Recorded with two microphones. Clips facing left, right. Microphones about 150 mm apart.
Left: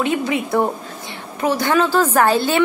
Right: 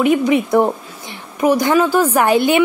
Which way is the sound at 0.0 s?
15° right (ahead or behind).